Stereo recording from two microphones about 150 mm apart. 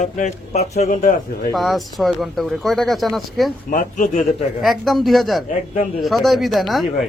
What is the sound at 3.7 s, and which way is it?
Speech, 60° left (ahead or behind).